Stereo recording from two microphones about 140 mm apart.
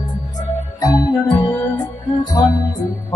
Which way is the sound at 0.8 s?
25° left (ahead or behind).